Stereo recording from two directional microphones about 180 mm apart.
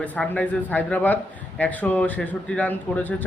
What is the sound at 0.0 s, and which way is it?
A man's voice, 5° left (ahead or behind).